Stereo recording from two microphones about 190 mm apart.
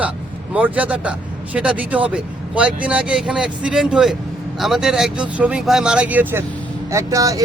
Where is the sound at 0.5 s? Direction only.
10° right (ahead or behind).